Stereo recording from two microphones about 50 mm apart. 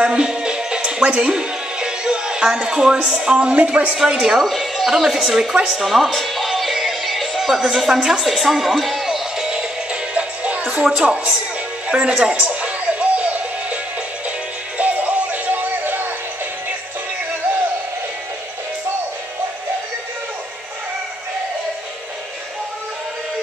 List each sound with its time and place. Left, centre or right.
0.0 s music: centre
3.9 s speech: centre
4.4 s speech: centre
5.8 s music: centre
7.7 s speech: centre
10.1 s music: right
10.7 s speech: centre
11.9 s music: right
14.8 s music: right